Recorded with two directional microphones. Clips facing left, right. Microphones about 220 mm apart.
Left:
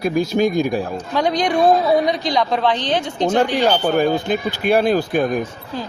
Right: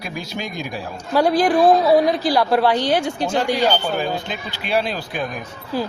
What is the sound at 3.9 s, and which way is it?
Speech, 50° left (ahead or behind).